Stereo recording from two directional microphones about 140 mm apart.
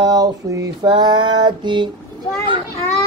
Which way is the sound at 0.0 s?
25° right (ahead or behind).